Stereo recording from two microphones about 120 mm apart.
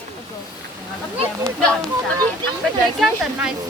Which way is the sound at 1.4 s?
5° left (ahead or behind).